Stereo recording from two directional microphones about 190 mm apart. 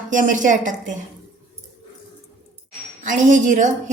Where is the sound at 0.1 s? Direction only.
40° right (ahead or behind).